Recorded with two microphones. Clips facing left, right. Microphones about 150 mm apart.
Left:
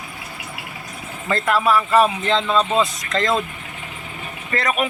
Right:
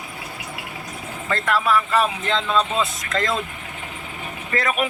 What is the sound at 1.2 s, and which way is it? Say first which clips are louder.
Speech: left 3 dB; 10° left (ahead or behind).